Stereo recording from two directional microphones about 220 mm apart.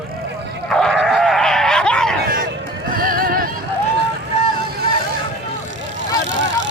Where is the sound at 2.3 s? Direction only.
40° right (ahead or behind).